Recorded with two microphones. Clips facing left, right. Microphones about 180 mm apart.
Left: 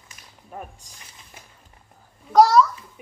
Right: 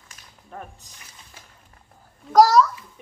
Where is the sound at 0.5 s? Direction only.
10° left (ahead or behind).